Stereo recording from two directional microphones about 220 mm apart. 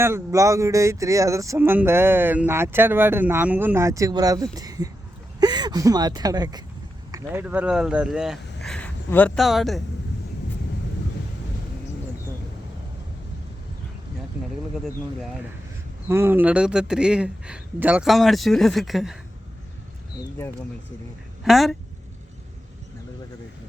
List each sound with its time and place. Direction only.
0.0 s speech: 10° right (ahead or behind)
16.0 s a man's voice: 10° right (ahead or behind)
21.4 s a man's voice: centre (ahead or behind)